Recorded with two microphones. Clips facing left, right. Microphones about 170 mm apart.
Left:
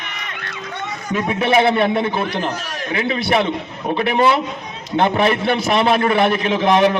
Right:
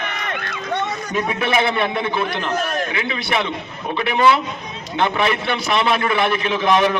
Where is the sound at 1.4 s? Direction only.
35° left (ahead or behind).